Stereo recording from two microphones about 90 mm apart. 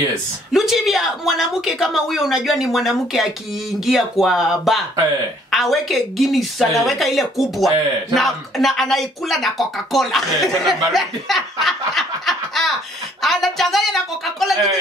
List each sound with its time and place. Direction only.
0.5 s speech: 5° right (ahead or behind)
11.9 s snicker: 5° left (ahead or behind)
13.2 s speech: centre (ahead or behind)